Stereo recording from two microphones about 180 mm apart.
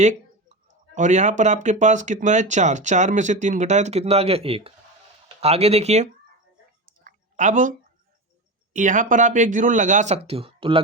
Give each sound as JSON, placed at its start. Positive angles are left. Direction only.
{"t": 0.0, "sound": "speech", "side_deg": -40}
{"t": 6.8, "sound": "a sound", "side_deg": -50}
{"t": 8.7, "sound": "speech", "side_deg": -45}